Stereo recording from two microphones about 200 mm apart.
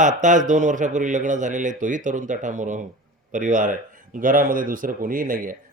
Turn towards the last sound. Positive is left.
turn(degrees=-45)  # may be behind; listen again after turning